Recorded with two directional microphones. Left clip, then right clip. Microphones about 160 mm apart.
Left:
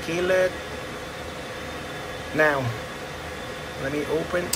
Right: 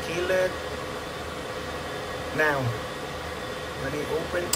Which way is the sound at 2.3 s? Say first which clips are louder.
Left 4 dB; 5° right (ahead or behind).